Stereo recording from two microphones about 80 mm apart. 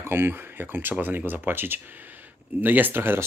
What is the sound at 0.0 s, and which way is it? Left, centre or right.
Speech, right.